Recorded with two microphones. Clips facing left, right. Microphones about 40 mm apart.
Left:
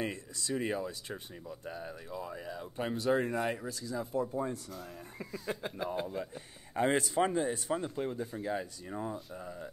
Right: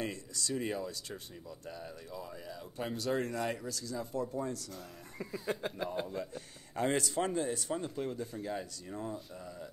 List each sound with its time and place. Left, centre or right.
0.0 s speech: left
5.2 s speech: centre
6.1 s speech: centre